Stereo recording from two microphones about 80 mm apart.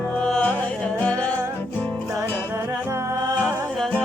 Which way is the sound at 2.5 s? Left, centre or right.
Right.